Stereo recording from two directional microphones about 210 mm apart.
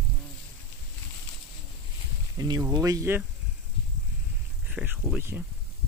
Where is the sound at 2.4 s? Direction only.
15° right (ahead or behind).